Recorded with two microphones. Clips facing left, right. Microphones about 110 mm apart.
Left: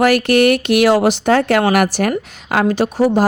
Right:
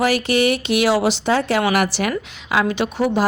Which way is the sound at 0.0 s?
55° left (ahead or behind).